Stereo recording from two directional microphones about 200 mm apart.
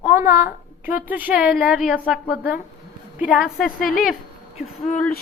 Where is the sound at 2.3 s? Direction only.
50° left (ahead or behind).